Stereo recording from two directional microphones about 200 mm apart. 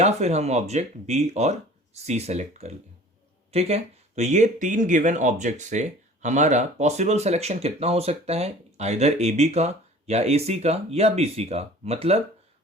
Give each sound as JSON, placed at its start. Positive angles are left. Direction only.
{"t": 0.0, "sound": "speech", "side_deg": -35}